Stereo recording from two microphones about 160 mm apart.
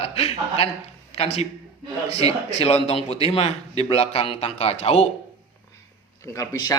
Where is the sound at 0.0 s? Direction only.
40° left (ahead or behind).